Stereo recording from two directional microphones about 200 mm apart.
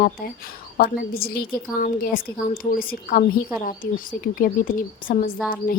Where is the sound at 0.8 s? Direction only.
50° left (ahead or behind).